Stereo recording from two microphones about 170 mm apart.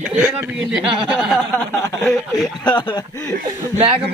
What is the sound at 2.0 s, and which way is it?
Speech, centre (ahead or behind).